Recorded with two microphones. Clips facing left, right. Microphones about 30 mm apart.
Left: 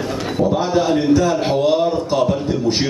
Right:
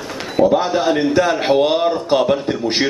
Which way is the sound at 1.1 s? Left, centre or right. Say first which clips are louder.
Right 2 dB; right.